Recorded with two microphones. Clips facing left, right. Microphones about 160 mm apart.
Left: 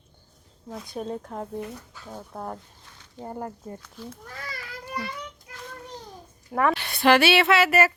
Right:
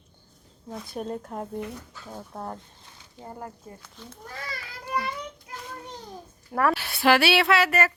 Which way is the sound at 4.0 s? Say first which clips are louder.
Left 6 dB; 10° left (ahead or behind).